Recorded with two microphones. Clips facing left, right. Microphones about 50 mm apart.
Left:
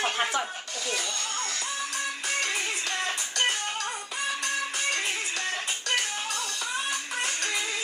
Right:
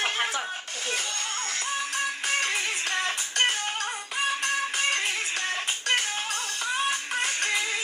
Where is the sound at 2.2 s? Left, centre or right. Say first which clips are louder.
Right 1 dB; right.